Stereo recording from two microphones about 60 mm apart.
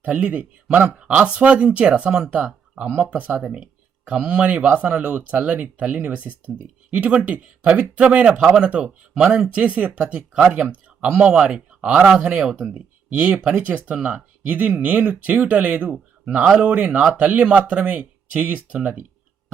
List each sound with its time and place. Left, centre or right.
0.0 s speech: right